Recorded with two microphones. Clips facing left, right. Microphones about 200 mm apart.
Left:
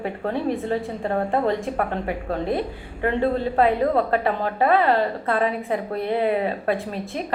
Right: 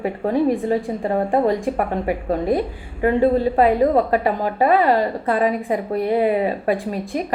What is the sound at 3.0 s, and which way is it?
A woman's voice, 10° right (ahead or behind).